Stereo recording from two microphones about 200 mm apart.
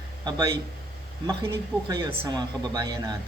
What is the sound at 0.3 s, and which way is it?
Speech, 20° right (ahead or behind).